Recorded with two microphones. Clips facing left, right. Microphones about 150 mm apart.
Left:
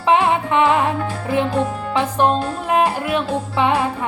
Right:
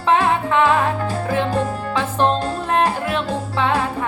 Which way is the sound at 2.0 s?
15° left (ahead or behind).